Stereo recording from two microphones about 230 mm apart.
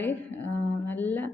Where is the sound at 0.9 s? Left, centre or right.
Centre.